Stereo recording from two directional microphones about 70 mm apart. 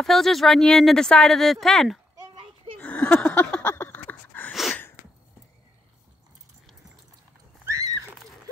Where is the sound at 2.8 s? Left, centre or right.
Centre.